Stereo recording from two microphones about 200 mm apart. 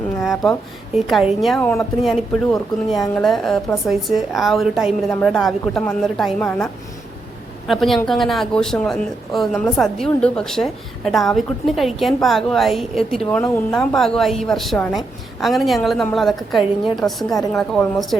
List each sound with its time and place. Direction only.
0.2 s speech: centre (ahead or behind)
7.7 s speech: centre (ahead or behind)